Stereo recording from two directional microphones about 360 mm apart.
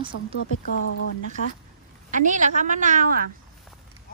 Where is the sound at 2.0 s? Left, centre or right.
Right.